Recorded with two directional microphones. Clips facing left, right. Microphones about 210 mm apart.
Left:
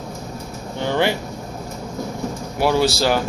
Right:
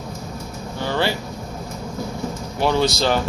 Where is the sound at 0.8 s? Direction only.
20° left (ahead or behind).